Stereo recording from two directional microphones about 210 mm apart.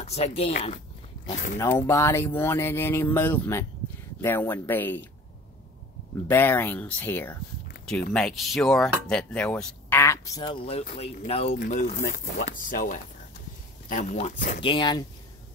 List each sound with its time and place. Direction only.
0.0 s speech: 30° left (ahead or behind)
1.6 s speech: 15° left (ahead or behind)
6.2 s speech: 10° left (ahead or behind)